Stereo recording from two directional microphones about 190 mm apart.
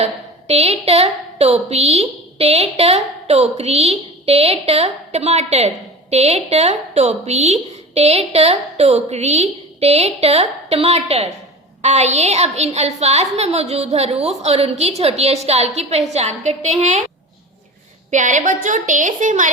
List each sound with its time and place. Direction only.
0.0 s a woman's voice: 35° right (ahead or behind)
18.1 s a woman's voice: 40° right (ahead or behind)